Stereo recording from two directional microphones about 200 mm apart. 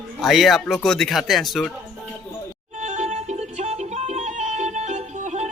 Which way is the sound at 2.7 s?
40° right (ahead or behind).